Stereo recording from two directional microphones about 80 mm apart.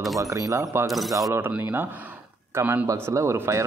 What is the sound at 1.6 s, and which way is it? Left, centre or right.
A man's voice, right.